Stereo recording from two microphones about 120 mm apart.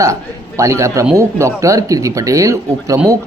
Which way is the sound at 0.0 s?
25° right (ahead or behind).